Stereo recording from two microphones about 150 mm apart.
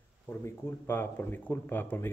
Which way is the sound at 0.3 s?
15° left (ahead or behind).